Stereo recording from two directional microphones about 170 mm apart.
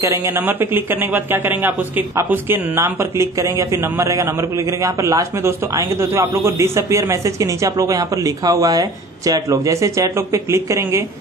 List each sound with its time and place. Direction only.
0.0 s speech: 15° right (ahead or behind)